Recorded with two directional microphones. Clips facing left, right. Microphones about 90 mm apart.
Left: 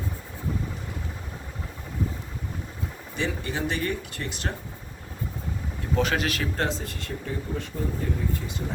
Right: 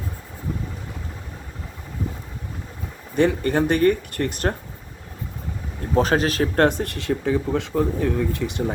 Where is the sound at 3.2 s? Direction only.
55° right (ahead or behind).